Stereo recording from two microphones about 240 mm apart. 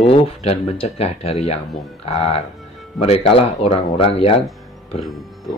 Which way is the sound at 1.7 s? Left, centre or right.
Centre.